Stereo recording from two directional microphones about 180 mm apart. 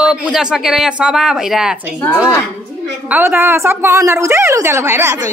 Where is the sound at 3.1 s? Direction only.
10° right (ahead or behind).